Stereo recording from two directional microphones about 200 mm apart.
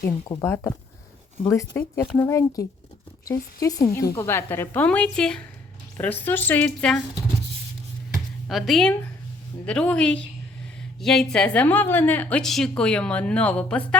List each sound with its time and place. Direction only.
0.3 s a woman's voice: 10° left (ahead or behind)
8.4 s a woman's voice: centre (ahead or behind)